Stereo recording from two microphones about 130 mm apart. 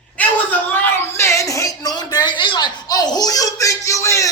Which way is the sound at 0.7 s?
20° left (ahead or behind).